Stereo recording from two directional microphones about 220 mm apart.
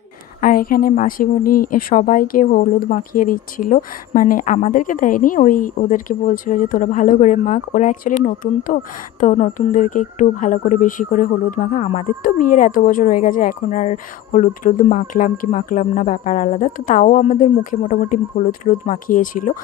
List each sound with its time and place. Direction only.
0.4 s a woman's voice: 40° left (ahead or behind)